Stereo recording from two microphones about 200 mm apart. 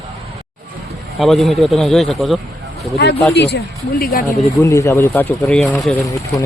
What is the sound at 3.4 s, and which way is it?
Speech, 55° left (ahead or behind).